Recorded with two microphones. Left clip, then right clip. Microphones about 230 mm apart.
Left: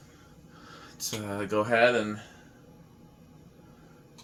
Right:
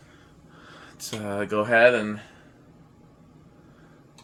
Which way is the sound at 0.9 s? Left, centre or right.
Right.